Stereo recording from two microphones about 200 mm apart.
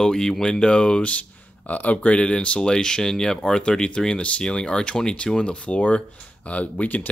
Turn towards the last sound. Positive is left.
turn(degrees=10)  # may be behind; listen again after turning